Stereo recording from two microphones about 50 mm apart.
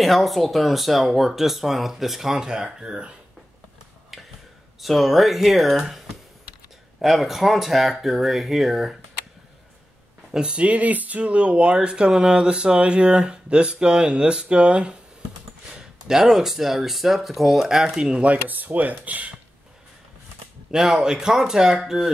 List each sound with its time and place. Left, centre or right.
0.0 s speech: centre
4.1 s a sound: centre
4.8 s speech: centre
10.3 s speech: centre
10.6 s speech: right; by 17.8 s centre
17.8 s speech: centre
18.3 s speech: right
20.7 s speech: centre